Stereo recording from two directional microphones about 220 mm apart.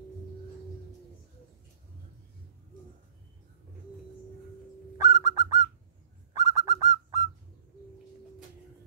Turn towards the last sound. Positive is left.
turn(degrees=-15)  # may be behind; listen again after turning